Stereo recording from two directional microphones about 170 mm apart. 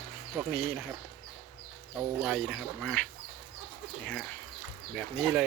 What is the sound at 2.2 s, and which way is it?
Speech, centre (ahead or behind).